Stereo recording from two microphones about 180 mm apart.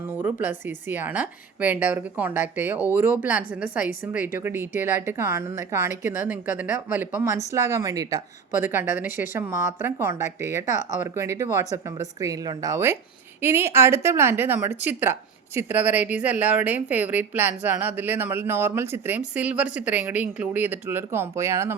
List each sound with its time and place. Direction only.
0.2 s speech: 10° right (ahead or behind)